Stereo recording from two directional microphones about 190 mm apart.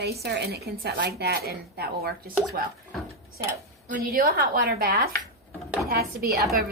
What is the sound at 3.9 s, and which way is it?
A woman's voice, 50° right (ahead or behind).